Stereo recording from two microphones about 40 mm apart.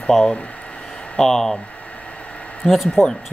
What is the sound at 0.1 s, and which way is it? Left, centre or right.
Speech, centre.